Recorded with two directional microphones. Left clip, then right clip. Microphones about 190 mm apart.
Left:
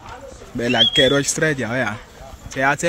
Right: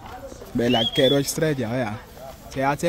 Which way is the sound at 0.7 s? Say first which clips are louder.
Left 5 dB; 5° right (ahead or behind).